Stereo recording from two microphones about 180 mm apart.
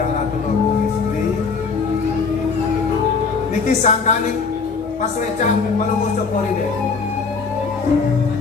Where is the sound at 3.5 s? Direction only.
40° left (ahead or behind).